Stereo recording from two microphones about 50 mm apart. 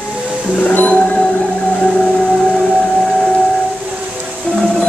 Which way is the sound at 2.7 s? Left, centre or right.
Centre.